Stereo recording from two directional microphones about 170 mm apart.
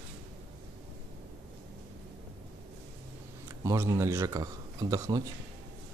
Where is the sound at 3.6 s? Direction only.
15° right (ahead or behind).